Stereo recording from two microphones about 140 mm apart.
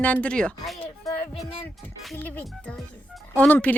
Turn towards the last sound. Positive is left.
turn(degrees=10)  # may be behind; listen again after turning